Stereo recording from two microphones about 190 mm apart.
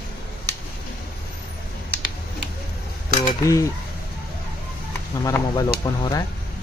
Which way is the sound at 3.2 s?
15° left (ahead or behind).